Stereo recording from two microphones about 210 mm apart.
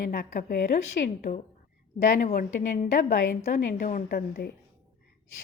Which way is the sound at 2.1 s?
40° left (ahead or behind).